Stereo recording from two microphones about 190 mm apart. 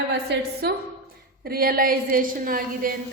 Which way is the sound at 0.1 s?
60° right (ahead or behind).